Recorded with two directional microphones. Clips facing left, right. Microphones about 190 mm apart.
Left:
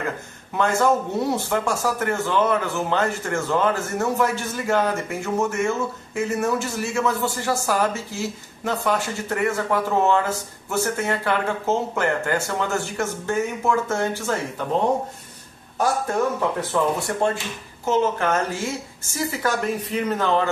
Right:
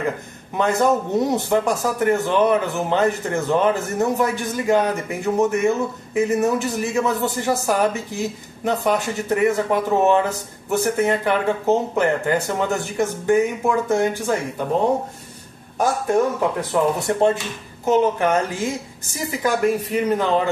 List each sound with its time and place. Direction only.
0.6 s speech: 20° right (ahead or behind)
16.7 s speech: 20° right (ahead or behind)